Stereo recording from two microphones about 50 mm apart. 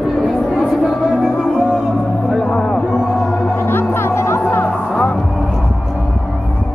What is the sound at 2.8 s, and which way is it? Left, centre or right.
Music, centre.